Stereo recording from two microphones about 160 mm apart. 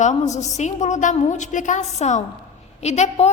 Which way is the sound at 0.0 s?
45° left (ahead or behind).